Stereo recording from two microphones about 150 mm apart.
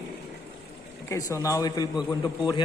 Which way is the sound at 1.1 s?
20° left (ahead or behind).